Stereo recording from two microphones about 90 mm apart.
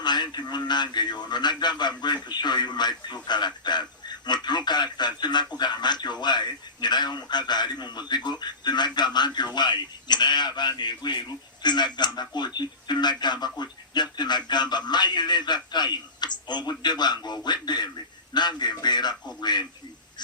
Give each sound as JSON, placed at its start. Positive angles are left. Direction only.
{"t": 0.0, "sound": "a man's voice", "side_deg": 55}